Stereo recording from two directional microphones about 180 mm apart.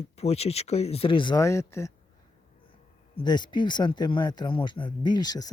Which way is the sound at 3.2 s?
25° left (ahead or behind).